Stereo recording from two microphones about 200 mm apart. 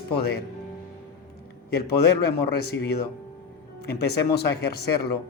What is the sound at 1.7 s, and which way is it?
Speech, 50° left (ahead or behind).